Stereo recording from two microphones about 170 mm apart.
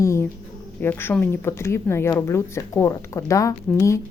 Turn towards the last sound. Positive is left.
turn(degrees=20)  # may be behind; listen again after turning